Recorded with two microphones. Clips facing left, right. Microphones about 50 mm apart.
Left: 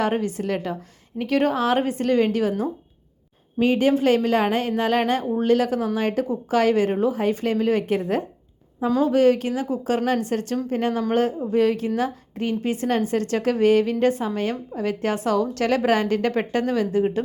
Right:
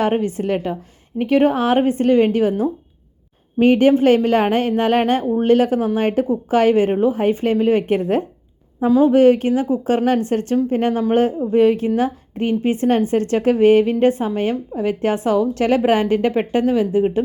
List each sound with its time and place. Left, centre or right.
0.0 s a woman's voice: right
3.6 s a woman's voice: right; by 17.1 s centre